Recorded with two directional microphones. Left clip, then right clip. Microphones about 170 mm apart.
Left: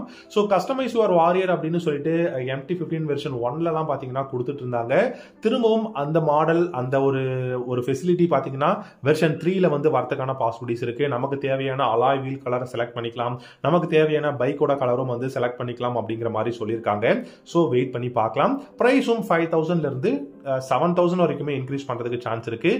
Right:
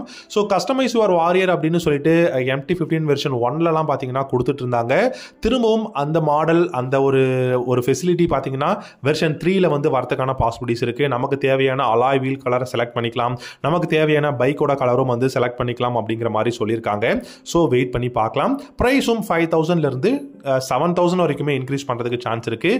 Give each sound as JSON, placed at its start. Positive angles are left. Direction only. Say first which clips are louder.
{"t": 0.3, "sound": "speech", "louder": "right 2 dB", "side_deg": -30}